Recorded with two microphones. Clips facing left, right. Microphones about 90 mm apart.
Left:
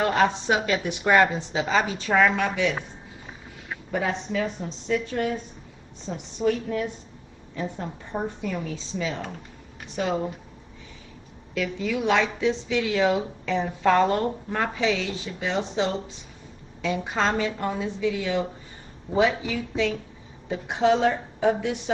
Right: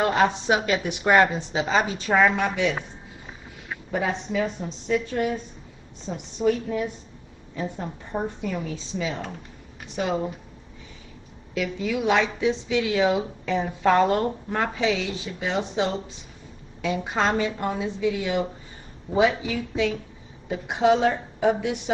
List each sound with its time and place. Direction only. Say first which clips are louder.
0.0 s a woman's voice: right 1 dB; 10° right (ahead or behind)
3.9 s a woman's voice: right 1 dB; 10° right (ahead or behind)
7.8 s a woman's voice: right 1 dB; centre (ahead or behind)
11.5 s a woman's voice: right 1 dB; 10° right (ahead or behind)